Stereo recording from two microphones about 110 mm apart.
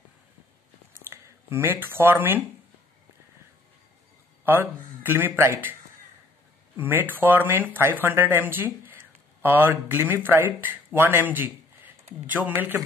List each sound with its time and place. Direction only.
0.9 s speech: 20° right (ahead or behind)
4.5 s speech: 20° right (ahead or behind)
6.8 s speech: 20° right (ahead or behind)